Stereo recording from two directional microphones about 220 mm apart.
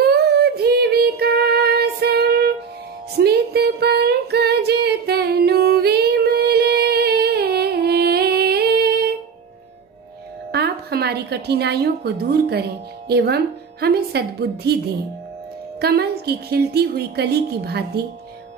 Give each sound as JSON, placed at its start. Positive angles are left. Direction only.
{"t": 0.0, "sound": "child singing", "side_deg": -45}
{"t": 3.2, "sound": "a sound", "side_deg": -45}
{"t": 10.5, "sound": "a woman's voice", "side_deg": -45}
{"t": 15.8, "sound": "a woman's voice", "side_deg": -45}